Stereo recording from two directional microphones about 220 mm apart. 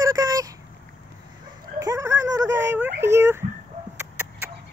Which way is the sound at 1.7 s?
15° right (ahead or behind).